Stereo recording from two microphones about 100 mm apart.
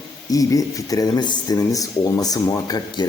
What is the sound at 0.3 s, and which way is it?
Speech, 35° left (ahead or behind).